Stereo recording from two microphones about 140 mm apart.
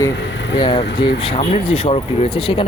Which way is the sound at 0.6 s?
35° left (ahead or behind).